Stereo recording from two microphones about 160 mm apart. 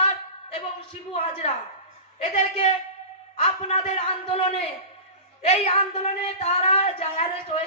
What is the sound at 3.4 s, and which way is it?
A woman's voice, 40° left (ahead or behind).